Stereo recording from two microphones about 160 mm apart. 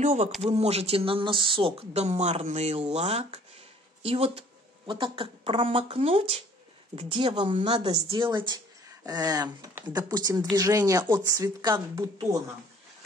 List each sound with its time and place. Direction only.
0.0 s speech: 45° right (ahead or behind); by 12.4 s 20° right (ahead or behind)